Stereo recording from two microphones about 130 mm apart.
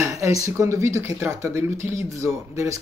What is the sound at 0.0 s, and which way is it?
Speech, 25° right (ahead or behind).